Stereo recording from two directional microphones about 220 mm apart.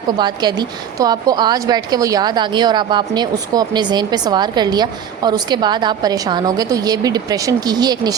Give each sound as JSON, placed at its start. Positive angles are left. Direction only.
{"t": 0.2, "sound": "a woman's voice", "side_deg": -20}